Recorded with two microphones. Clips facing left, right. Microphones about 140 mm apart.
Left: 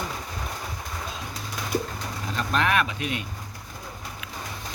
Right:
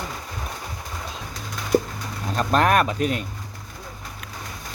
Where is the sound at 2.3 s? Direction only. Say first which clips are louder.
Right 5 dB; 40° right (ahead or behind).